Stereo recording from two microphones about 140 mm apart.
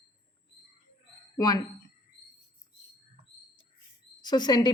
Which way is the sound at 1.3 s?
25° left (ahead or behind).